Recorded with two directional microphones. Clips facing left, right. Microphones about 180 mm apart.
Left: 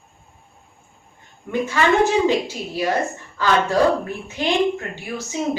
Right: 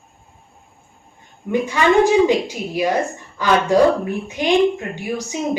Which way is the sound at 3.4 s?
15° right (ahead or behind).